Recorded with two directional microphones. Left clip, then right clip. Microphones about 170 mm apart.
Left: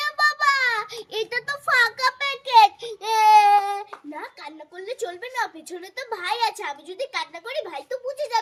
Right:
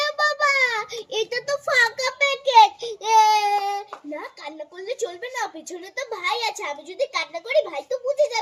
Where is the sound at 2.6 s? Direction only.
20° left (ahead or behind).